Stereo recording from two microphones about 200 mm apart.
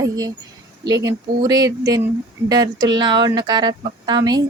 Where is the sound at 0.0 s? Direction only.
15° right (ahead or behind).